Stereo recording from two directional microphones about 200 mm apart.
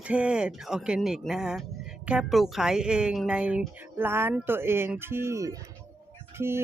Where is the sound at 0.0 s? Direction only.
5° right (ahead or behind).